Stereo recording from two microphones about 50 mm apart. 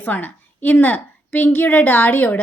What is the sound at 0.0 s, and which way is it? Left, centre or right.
A woman's voice, left.